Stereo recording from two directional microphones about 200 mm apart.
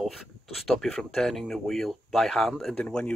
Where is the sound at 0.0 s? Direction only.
Centre (ahead or behind).